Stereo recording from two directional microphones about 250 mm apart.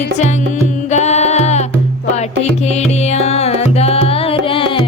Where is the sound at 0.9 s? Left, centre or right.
Left.